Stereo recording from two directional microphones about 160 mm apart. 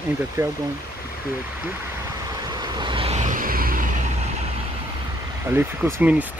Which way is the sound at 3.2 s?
55° right (ahead or behind).